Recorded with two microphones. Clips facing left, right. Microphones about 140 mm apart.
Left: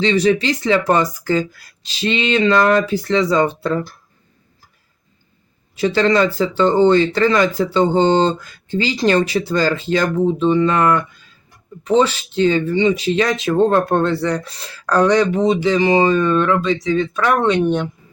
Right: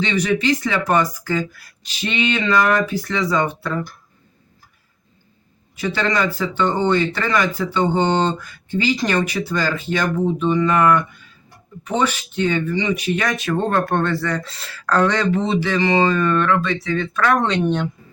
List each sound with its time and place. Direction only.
0.0 s speech: 30° left (ahead or behind)
5.8 s speech: 30° left (ahead or behind)
12.4 s speech: 30° left (ahead or behind); by 17.8 s 10° left (ahead or behind)